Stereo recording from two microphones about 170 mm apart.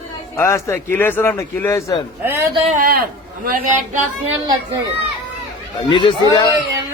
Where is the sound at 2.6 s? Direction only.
45° right (ahead or behind).